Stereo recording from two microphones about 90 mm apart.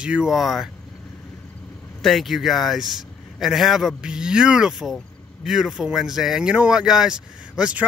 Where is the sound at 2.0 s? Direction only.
Centre (ahead or behind).